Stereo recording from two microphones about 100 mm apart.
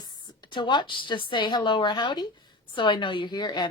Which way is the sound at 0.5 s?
50° left (ahead or behind).